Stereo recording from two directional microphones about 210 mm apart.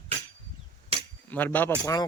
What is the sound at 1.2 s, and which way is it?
Speech, 10° left (ahead or behind).